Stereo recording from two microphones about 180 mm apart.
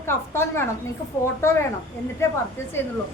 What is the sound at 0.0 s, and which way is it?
A woman's voice, 15° left (ahead or behind).